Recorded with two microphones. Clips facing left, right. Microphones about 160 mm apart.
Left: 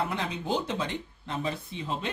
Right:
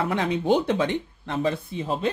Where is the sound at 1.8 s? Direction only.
45° right (ahead or behind).